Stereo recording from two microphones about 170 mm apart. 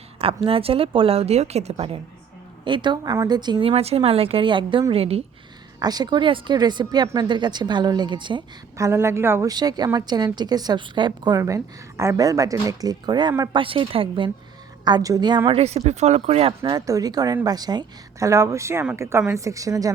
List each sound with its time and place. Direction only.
0.4 s a woman's voice: 35° right (ahead or behind)
5.8 s a woman's voice: 25° right (ahead or behind)
8.9 s a woman's voice: 15° right (ahead or behind)
15.4 s a woman's voice: 35° right (ahead or behind); by 19.9 s 20° right (ahead or behind)